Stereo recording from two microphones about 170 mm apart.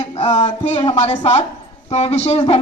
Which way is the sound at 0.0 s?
35° left (ahead or behind).